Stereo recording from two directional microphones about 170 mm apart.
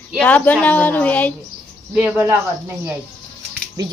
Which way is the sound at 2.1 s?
15° right (ahead or behind).